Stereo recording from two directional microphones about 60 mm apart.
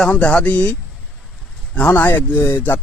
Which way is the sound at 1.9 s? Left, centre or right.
Left.